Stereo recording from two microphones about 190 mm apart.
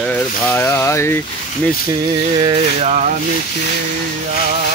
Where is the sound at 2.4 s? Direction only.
35° right (ahead or behind).